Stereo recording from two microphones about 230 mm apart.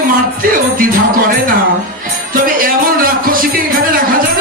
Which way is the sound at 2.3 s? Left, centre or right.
Right.